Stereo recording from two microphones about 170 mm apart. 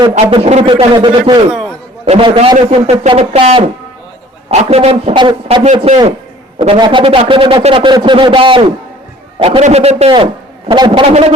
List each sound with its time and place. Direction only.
0.1 s a man's voice: 35° right (ahead or behind)
2.6 s a man's voice: 40° right (ahead or behind)
6.6 s a man's voice: 25° right (ahead or behind)